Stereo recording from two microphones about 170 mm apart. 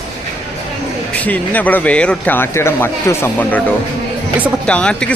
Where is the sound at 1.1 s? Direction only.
10° left (ahead or behind).